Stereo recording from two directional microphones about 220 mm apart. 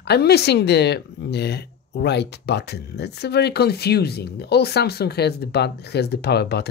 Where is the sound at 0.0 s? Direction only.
45° left (ahead or behind).